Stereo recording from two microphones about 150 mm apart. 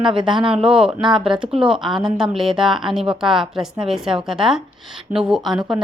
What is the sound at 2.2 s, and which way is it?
Speech, centre (ahead or behind).